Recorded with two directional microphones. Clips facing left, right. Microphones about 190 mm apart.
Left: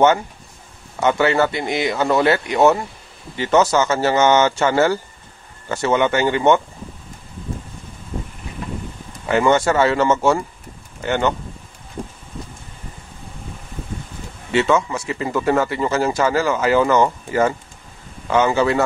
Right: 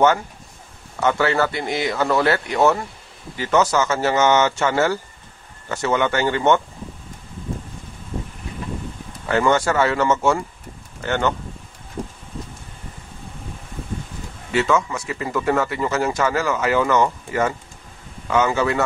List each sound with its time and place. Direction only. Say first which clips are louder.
0.9 s speech: left 2 dB; 20° left (ahead or behind)
9.2 s speech: left 2 dB; 15° left (ahead or behind)
11.0 s speech: left 2 dB; 15° left (ahead or behind)
14.5 s speech: left 2 dB; 25° left (ahead or behind)